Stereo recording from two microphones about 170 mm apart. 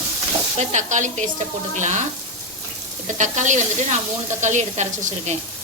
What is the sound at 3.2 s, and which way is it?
A woman's voice, 45° right (ahead or behind).